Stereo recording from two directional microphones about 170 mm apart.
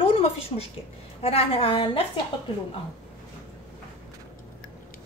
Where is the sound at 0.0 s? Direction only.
35° left (ahead or behind).